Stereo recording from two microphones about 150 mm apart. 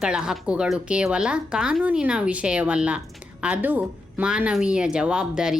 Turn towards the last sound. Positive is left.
turn(degrees=-5)  # may be behind; listen again after turning